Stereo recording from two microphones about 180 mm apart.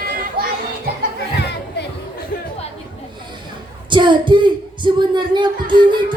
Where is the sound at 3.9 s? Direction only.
25° right (ahead or behind).